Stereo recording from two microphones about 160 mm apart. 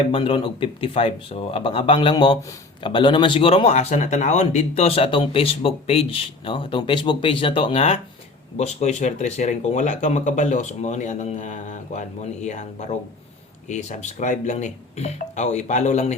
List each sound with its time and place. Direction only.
0.1 s speech: 35° left (ahead or behind)